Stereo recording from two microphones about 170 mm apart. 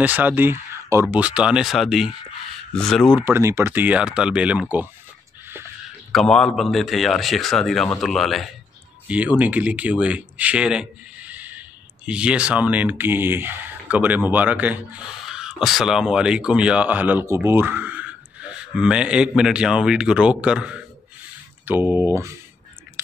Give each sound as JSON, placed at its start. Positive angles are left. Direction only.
{"t": 0.0, "sound": "speech", "side_deg": -10}
{"t": 3.2, "sound": "speech", "side_deg": -15}
{"t": 6.1, "sound": "speech", "side_deg": 5}